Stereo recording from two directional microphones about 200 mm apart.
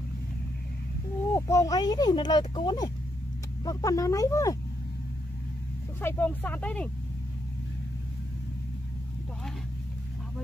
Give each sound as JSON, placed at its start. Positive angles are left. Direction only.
{"t": 1.3, "sound": "speech", "side_deg": 15}
{"t": 5.9, "sound": "speech", "side_deg": 10}